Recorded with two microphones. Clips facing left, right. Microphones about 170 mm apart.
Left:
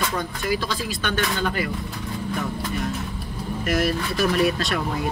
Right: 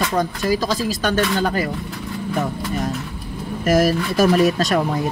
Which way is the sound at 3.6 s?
40° right (ahead or behind).